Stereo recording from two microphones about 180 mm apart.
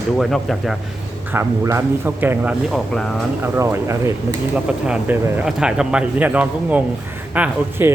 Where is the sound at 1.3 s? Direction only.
15° right (ahead or behind).